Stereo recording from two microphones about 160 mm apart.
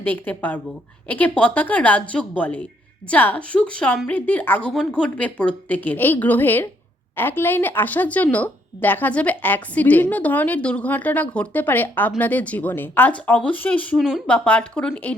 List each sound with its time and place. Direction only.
0.0 s speech: 10° left (ahead or behind)